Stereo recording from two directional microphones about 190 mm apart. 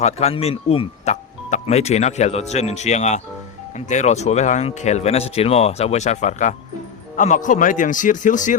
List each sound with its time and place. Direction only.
0.0 s a man's voice: 35° left (ahead or behind)